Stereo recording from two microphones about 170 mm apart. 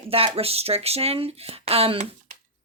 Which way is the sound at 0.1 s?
35° right (ahead or behind).